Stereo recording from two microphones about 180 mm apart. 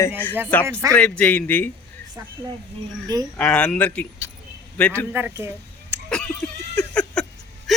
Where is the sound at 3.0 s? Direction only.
20° right (ahead or behind).